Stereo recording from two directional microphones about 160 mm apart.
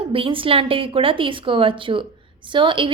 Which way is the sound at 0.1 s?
35° right (ahead or behind).